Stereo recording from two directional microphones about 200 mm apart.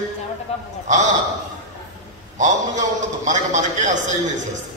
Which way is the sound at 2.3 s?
40° right (ahead or behind).